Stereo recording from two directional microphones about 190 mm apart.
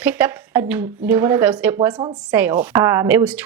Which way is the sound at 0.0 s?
10° right (ahead or behind).